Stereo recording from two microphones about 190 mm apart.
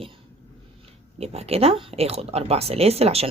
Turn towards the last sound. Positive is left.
turn(degrees=-30)  # may be behind; listen again after turning